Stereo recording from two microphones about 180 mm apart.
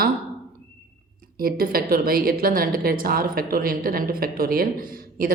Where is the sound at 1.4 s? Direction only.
55° right (ahead or behind).